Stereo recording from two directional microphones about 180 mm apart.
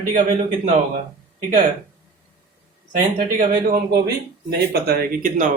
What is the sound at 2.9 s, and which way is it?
Speech, 50° right (ahead or behind).